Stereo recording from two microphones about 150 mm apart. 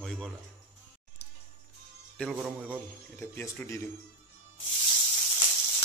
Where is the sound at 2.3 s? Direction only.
10° right (ahead or behind).